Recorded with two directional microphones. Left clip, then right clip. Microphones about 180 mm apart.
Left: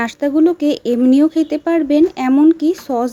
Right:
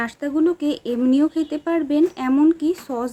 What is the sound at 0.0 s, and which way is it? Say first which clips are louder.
Speech: left 6 dB; 35° left (ahead or behind).